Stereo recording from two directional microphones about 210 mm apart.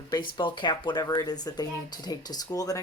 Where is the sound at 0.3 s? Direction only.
20° left (ahead or behind).